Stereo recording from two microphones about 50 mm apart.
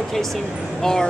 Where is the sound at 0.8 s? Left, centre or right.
Centre.